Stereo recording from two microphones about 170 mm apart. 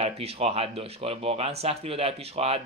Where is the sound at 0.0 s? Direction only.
35° right (ahead or behind).